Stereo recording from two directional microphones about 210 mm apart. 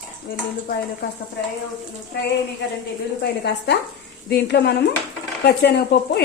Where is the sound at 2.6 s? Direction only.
55° left (ahead or behind).